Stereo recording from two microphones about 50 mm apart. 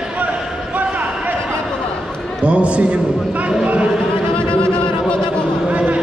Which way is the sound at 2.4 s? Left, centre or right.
Right.